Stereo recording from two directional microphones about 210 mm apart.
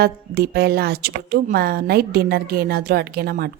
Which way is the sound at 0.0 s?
50° right (ahead or behind).